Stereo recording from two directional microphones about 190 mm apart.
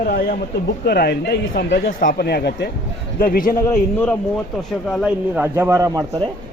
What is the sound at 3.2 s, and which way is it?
Speech, 50° left (ahead or behind).